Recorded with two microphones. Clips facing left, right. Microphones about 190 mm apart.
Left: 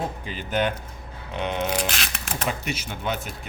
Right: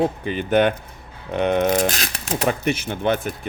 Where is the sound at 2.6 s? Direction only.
55° right (ahead or behind).